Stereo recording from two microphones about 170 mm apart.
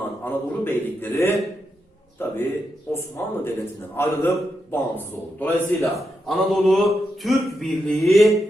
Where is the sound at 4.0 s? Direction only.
15° left (ahead or behind).